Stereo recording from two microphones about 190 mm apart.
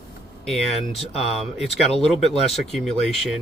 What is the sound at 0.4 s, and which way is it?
Speech, centre (ahead or behind).